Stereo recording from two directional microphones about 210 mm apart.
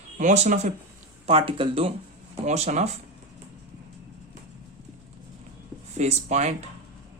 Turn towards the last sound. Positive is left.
turn(degrees=-35)  # may be behind; listen again after turning